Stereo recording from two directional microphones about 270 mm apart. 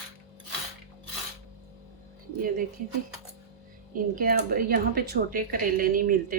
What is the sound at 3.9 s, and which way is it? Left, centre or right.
Speech, right.